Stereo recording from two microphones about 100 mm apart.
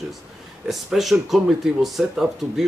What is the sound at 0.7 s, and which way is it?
Speech, centre (ahead or behind).